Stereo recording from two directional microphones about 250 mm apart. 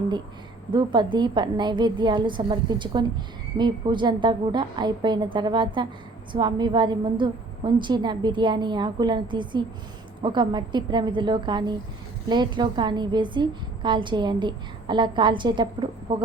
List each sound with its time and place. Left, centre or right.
0.7 s a woman's voice: centre